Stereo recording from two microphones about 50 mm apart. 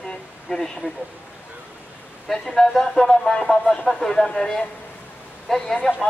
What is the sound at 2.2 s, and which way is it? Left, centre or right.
Speech, centre.